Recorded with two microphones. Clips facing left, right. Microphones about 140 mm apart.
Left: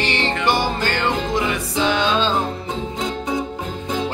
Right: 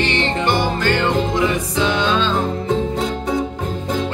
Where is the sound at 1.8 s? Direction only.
15° left (ahead or behind).